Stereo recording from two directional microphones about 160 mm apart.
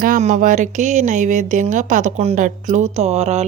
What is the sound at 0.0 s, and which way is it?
A woman's voice, 50° right (ahead or behind).